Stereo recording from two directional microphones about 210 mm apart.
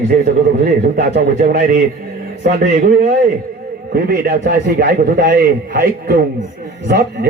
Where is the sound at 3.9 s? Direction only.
45° right (ahead or behind).